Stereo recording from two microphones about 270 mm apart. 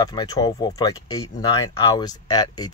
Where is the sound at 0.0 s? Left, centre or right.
Centre.